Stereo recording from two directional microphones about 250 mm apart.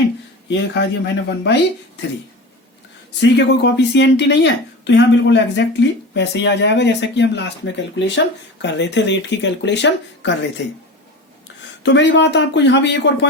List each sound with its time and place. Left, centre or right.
0.7 s speech: left
3.2 s speech: left
11.8 s speech: left